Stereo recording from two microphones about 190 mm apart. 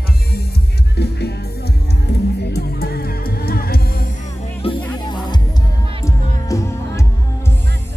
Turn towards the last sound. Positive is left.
turn(degrees=15)  # may be behind; listen again after turning